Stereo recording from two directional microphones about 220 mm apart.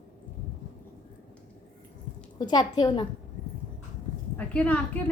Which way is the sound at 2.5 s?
20° left (ahead or behind).